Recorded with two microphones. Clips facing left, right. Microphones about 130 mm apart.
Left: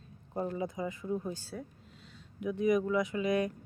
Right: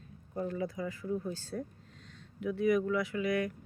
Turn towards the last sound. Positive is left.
turn(degrees=20)  # may be behind; listen again after turning